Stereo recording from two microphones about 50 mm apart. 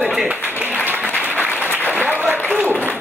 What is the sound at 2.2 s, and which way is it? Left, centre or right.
Applause, right.